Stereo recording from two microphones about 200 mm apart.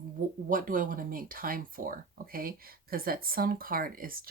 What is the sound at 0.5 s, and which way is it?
Speech, 45° right (ahead or behind).